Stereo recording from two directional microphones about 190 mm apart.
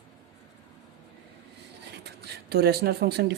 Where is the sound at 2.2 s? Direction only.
55° right (ahead or behind).